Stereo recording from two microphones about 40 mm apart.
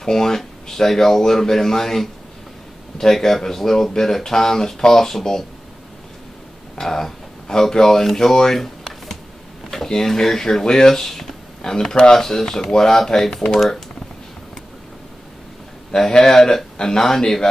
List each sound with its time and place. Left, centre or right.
0.0 s speech: centre
6.7 s speech: centre
13.6 s speech: centre
16.2 s speech: centre